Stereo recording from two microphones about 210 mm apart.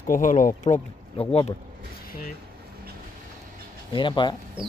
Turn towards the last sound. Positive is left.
turn(degrees=20)  # may be behind; listen again after turning